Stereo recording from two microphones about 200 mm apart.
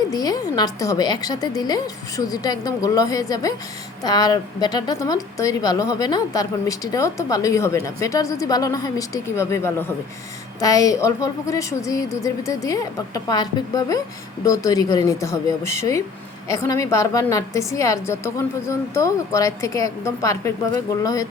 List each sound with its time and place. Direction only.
0.1 s a woman's voice: 20° left (ahead or behind)